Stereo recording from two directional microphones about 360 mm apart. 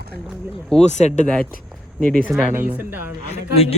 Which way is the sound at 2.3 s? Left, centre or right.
Centre.